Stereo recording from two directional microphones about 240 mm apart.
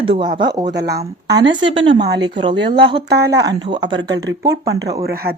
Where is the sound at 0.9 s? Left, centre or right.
Centre.